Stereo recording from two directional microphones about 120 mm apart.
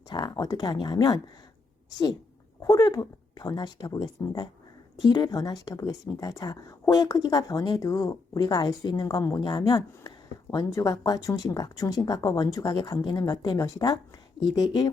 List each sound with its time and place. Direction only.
0.1 s speech: 35° left (ahead or behind)
2.6 s speech: 30° left (ahead or behind)